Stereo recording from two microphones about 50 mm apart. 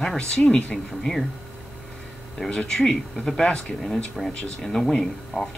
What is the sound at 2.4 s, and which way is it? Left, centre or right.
Speech, centre.